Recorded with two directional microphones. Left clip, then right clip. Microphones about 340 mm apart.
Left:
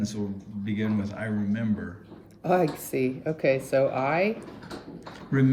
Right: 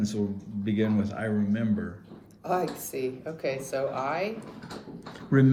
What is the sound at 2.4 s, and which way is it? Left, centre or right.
Speech, left.